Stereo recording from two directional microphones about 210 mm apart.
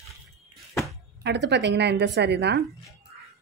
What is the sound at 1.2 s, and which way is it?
A woman's voice, 55° right (ahead or behind).